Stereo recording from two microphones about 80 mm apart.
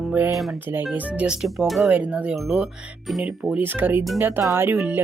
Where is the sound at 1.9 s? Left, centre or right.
Centre.